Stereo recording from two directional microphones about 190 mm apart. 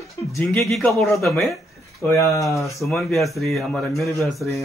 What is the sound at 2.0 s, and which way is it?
Speech, 15° left (ahead or behind).